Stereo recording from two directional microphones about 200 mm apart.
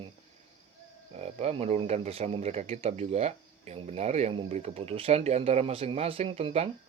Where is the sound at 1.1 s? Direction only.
30° right (ahead or behind).